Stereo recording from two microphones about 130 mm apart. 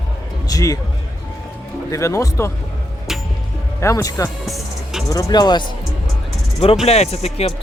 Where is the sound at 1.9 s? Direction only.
25° left (ahead or behind).